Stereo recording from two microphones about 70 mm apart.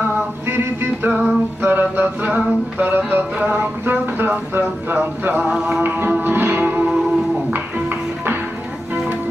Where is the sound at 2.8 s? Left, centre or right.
Right.